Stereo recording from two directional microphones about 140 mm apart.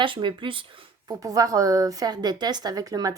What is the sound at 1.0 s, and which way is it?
A woman's voice, 25° right (ahead or behind).